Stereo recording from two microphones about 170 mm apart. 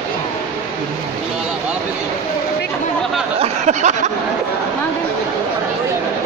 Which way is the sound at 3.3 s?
45° right (ahead or behind).